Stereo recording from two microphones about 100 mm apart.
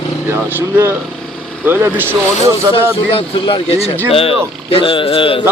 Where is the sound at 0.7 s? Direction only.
25° right (ahead or behind).